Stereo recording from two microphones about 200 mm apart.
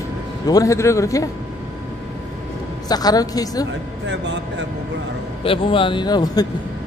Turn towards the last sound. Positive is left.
turn(degrees=20)  # may be behind; listen again after turning